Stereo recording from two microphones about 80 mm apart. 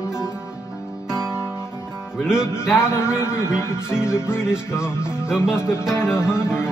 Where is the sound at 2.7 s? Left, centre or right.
Left.